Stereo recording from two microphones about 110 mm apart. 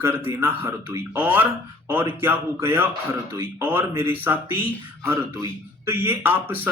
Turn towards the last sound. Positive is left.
turn(degrees=-20)  # may be behind; listen again after turning